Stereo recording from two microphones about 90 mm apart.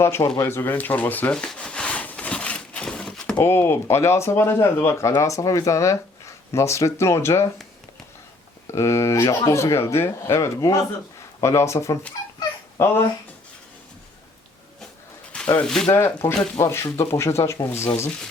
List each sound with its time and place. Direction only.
0.0 s speech: 30° left (ahead or behind)
1.3 s a sound: 10° left (ahead or behind)
3.4 s speech: 25° left (ahead or behind)
8.6 s speech: 30° left (ahead or behind)
15.3 s a sound: 15° left (ahead or behind)
15.6 s speech: 5° left (ahead or behind)
16.6 s speech: 35° left (ahead or behind)